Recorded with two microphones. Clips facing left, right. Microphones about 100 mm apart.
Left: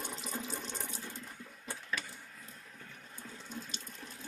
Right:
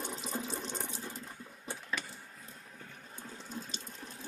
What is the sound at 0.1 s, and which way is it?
Water tap, 25° right (ahead or behind).